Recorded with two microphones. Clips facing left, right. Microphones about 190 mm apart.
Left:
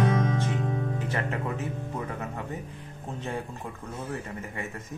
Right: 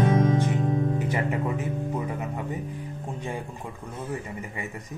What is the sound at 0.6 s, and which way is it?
Speech, 25° right (ahead or behind).